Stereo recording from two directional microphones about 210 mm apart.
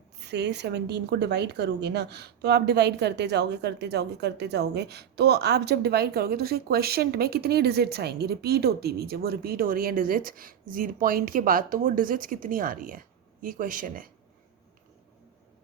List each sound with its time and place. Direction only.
0.2 s a woman's voice: 55° right (ahead or behind)